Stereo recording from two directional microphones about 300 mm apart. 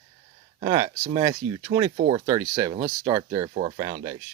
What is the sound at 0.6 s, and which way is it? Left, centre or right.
Speech, centre.